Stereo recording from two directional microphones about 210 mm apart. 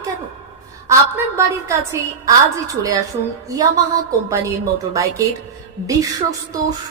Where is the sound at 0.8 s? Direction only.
15° right (ahead or behind).